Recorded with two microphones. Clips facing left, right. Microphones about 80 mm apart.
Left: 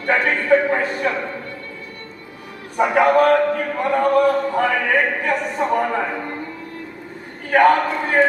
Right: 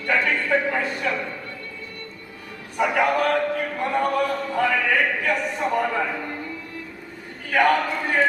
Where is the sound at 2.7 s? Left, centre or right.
Left.